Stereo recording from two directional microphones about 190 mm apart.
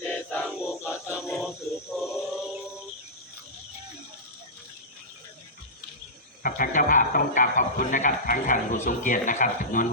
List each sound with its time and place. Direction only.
0.1 s choir: 5° left (ahead or behind)
0.6 s a sound: 5° right (ahead or behind)
6.4 s a man's voice: 45° left (ahead or behind)